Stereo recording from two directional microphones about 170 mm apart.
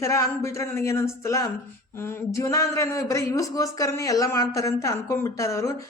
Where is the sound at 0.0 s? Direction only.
15° left (ahead or behind).